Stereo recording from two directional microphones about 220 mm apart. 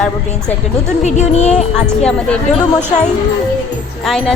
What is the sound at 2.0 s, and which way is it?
Speech, 5° left (ahead or behind).